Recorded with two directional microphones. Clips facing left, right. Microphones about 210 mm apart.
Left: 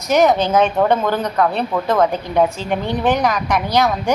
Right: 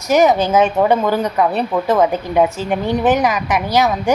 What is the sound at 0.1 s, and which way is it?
A woman's voice, centre (ahead or behind).